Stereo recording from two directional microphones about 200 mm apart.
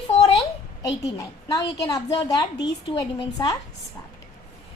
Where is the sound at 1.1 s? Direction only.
20° left (ahead or behind).